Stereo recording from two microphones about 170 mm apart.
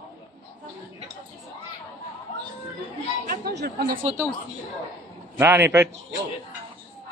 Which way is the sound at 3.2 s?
70° right (ahead or behind).